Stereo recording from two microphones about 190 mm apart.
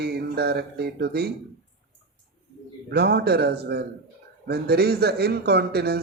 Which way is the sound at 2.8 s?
60° right (ahead or behind).